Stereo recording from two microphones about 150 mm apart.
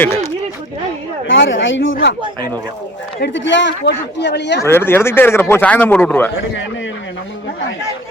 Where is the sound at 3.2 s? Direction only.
90° left.